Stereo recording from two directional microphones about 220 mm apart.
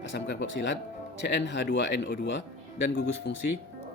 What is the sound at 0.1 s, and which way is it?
Speech, 50° left (ahead or behind).